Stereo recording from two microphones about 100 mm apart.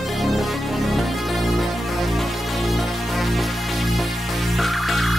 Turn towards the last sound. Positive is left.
turn(degrees=0)  # may be behind; listen again after turning